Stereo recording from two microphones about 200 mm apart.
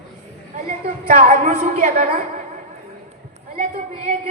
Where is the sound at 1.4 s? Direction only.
35° right (ahead or behind).